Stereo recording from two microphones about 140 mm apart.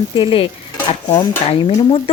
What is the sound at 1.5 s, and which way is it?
Speech, 45° left (ahead or behind).